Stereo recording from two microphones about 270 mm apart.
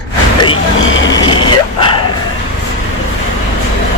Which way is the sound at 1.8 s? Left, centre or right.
Centre.